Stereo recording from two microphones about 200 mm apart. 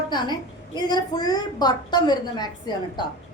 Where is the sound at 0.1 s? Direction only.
20° left (ahead or behind).